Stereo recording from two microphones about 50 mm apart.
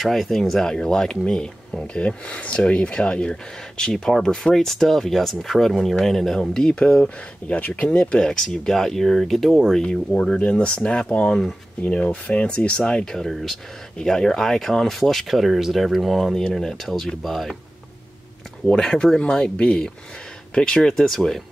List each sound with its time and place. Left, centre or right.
0.0 s speech: centre
7.4 s speech: left
8.2 s speech: centre
9.8 s speech: centre
11.1 s speech: centre
11.8 s speech: left; by 17.6 s centre
18.7 s speech: centre